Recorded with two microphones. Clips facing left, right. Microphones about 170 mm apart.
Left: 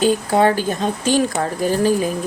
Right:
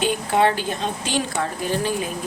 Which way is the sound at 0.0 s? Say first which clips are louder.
Left 4 dB; 40° left (ahead or behind).